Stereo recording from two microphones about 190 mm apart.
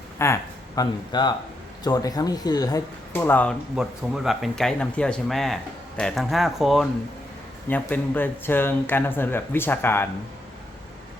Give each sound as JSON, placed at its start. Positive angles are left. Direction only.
{"t": 0.2, "sound": "speech", "side_deg": 15}
{"t": 3.8, "sound": "speech", "side_deg": -5}
{"t": 7.7, "sound": "speech", "side_deg": 10}